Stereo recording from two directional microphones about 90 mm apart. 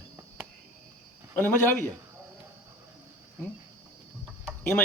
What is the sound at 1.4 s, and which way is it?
Speech, 20° left (ahead or behind).